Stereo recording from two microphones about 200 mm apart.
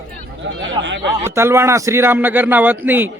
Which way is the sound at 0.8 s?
65° right (ahead or behind).